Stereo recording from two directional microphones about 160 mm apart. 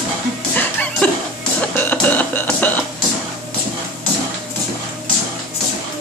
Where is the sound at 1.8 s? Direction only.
10° left (ahead or behind).